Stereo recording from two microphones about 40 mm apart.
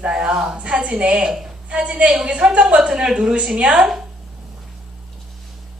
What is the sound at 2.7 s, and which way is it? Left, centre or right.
A woman's voice, centre.